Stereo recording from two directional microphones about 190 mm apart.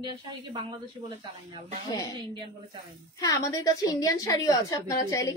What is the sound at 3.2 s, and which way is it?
A woman's voice, 20° left (ahead or behind).